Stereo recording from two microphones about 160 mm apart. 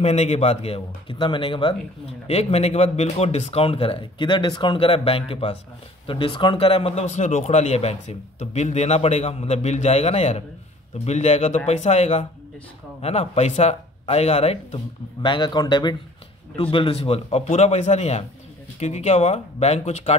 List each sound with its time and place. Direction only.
0.0 s speech: 45° left (ahead or behind)
2.2 s speech: 40° left (ahead or behind)
15.2 s speech: 30° left (ahead or behind)